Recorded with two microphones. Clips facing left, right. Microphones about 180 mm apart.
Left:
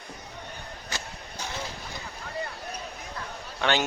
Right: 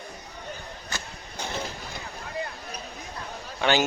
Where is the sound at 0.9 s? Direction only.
50° right (ahead or behind).